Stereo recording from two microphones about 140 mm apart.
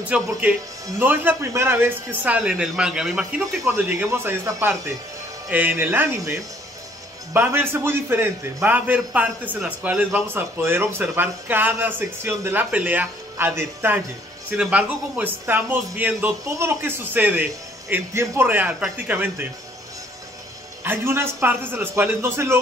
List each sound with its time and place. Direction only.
0.1 s a man's voice: 10° right (ahead or behind)
20.8 s a man's voice: 15° right (ahead or behind)